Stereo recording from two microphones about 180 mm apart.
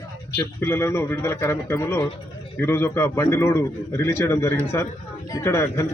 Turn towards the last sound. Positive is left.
turn(degrees=15)  # may be behind; listen again after turning